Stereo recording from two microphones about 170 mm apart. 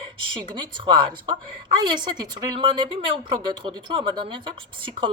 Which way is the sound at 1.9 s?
25° right (ahead or behind).